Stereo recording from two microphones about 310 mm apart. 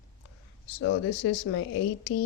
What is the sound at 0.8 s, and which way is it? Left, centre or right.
Speech, left.